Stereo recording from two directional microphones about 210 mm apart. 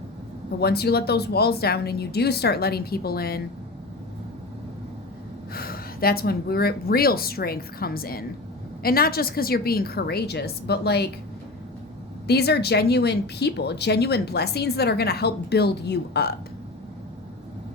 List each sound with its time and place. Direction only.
0.6 s speech: 50° left (ahead or behind)
5.5 s speech: 45° left (ahead or behind)
12.3 s speech: 50° left (ahead or behind)